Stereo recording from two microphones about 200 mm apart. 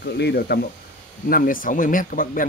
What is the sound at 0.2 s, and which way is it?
A man's voice, 55° left (ahead or behind).